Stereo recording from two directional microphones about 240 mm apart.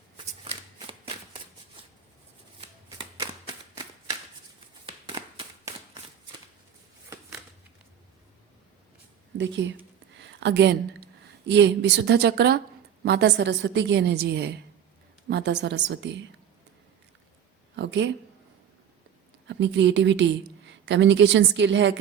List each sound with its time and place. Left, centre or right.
0.4 s shuffling cards: right
2.6 s shuffling cards: right
4.9 s a sound: right
7.1 s a sound: centre
9.4 s a woman's voice: right
17.7 s a woman's voice: right
19.5 s a woman's voice: right